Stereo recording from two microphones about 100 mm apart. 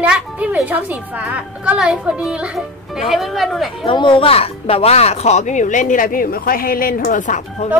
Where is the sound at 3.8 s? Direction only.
60° left (ahead or behind); by 5.3 s 90° left.